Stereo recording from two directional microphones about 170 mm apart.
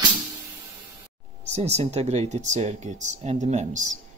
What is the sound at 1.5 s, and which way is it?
Speech, 40° right (ahead or behind).